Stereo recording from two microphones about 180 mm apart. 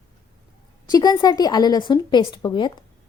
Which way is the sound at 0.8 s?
20° left (ahead or behind).